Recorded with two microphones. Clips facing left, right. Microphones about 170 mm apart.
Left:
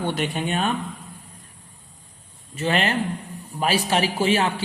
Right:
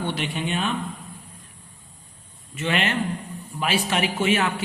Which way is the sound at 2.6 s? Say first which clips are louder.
Left 2 dB; 35° left (ahead or behind).